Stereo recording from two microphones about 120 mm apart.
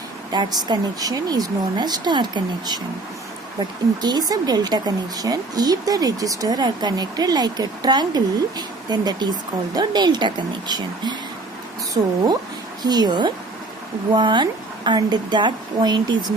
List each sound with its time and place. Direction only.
0.3 s speech: 35° right (ahead or behind)
4.0 s speech: 35° right (ahead or behind)
12.8 s speech: 35° right (ahead or behind)